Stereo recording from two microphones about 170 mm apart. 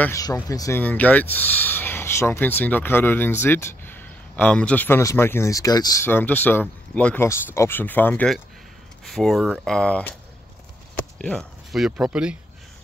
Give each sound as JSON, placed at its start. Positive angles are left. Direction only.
{"t": 0.0, "sound": "speech", "side_deg": 20}
{"t": 11.1, "sound": "speech", "side_deg": 5}